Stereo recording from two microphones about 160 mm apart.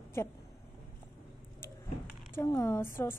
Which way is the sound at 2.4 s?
15° left (ahead or behind).